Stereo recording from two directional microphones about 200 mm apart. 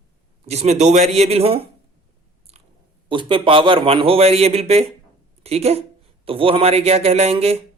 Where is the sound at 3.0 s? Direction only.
25° right (ahead or behind).